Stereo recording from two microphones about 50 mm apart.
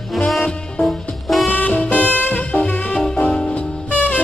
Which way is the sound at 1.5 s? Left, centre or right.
Left.